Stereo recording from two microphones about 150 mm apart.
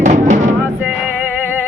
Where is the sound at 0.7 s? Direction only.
10° right (ahead or behind).